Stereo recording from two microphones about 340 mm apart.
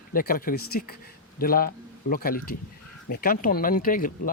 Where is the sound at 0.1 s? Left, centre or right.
Left.